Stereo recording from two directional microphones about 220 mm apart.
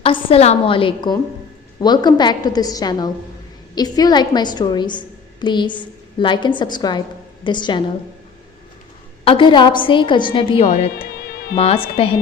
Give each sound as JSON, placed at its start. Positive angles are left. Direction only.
{"t": 0.0, "sound": "a woman's voice", "side_deg": 25}
{"t": 9.2, "sound": "a woman's voice", "side_deg": 20}